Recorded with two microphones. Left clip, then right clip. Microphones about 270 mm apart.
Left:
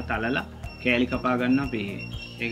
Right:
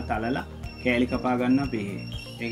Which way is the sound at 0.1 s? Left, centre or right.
Right.